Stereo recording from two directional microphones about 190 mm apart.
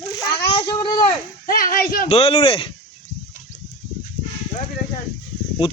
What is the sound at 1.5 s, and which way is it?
Speech, 50° left (ahead or behind).